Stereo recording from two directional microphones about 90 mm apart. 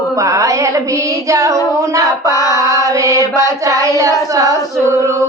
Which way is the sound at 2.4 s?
40° right (ahead or behind).